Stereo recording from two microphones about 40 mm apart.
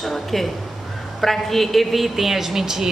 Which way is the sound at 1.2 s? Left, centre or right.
Centre.